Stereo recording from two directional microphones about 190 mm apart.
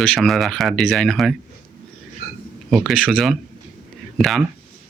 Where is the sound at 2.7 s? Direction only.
Centre (ahead or behind).